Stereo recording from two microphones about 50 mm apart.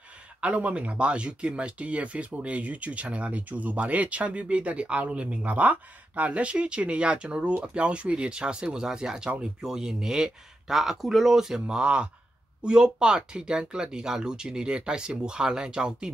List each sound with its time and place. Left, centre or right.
0.4 s speech: right